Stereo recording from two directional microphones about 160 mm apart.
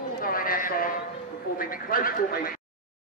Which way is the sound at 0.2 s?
60° left (ahead or behind).